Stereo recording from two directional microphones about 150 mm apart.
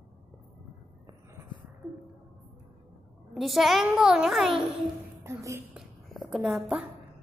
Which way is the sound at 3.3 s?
Centre (ahead or behind).